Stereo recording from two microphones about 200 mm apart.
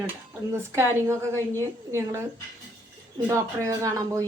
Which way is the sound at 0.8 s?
15° right (ahead or behind).